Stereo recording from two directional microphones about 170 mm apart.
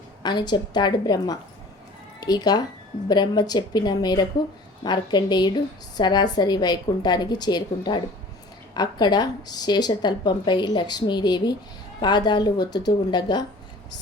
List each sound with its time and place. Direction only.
0.2 s a woman's voice: 25° left (ahead or behind)